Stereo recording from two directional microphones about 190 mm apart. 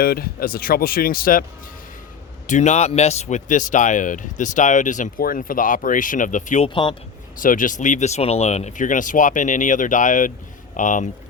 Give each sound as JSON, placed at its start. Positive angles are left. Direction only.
{"t": 0.0, "sound": "speech", "side_deg": 50}
{"t": 2.5, "sound": "speech", "side_deg": 40}